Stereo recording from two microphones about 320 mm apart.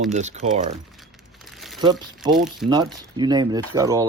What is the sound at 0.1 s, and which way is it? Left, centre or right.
Speech, right.